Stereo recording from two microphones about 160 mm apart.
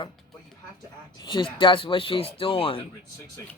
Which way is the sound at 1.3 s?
30° left (ahead or behind).